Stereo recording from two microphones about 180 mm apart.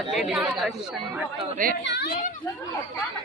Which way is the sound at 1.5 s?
50° right (ahead or behind).